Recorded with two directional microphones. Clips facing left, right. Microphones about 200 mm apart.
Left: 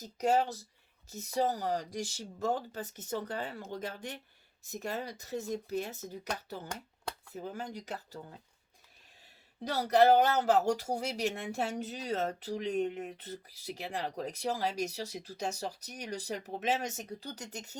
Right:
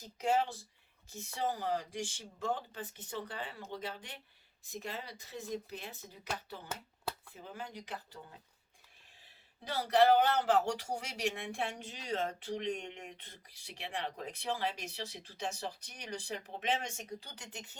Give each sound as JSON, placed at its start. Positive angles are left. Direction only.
{"t": 0.0, "sound": "speech", "side_deg": 40}
{"t": 9.6, "sound": "speech", "side_deg": 40}
{"t": 13.1, "sound": "speech", "side_deg": 5}
{"t": 13.7, "sound": "speech", "side_deg": 40}